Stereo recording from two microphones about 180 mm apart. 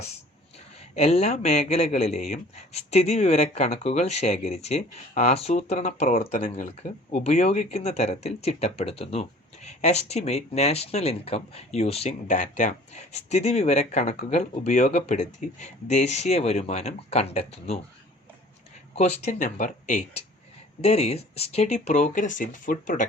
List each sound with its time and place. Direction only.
0.9 s speech: 35° left (ahead or behind)
18.9 s speech: 40° left (ahead or behind)